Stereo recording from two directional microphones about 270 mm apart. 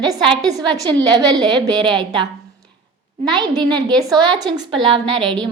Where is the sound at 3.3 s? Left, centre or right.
Centre.